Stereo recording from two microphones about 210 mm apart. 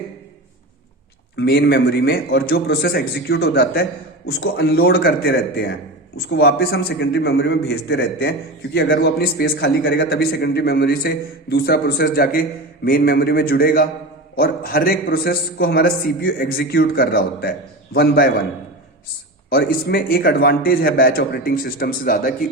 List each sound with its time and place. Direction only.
1.4 s a man's voice: 50° left (ahead or behind)
19.5 s a man's voice: 45° left (ahead or behind)